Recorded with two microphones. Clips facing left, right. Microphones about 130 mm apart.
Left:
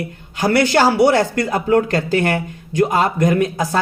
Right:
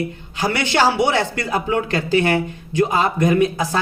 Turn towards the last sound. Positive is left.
turn(degrees=45)  # may be behind; listen again after turning